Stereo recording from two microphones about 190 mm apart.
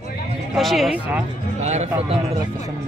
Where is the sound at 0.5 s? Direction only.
Centre (ahead or behind).